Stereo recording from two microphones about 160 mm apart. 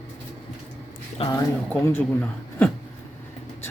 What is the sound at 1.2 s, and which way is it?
Speech, 35° left (ahead or behind).